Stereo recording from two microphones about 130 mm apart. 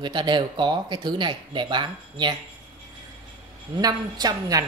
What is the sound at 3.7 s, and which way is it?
Speech, 30° right (ahead or behind).